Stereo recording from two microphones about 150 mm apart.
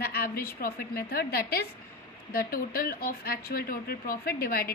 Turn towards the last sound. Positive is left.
turn(degrees=85)